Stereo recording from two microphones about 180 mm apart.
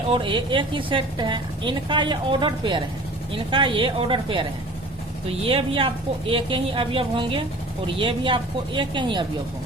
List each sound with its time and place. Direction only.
0.1 s a woman's voice: 30° right (ahead or behind)